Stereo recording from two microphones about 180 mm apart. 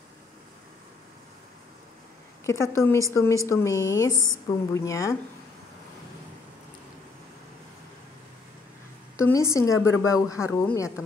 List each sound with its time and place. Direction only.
2.4 s a woman's voice: 15° left (ahead or behind)
9.1 s a woman's voice: 15° left (ahead or behind)